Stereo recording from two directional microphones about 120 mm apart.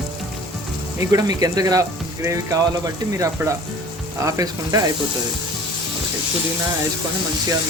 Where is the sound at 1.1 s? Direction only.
30° right (ahead or behind).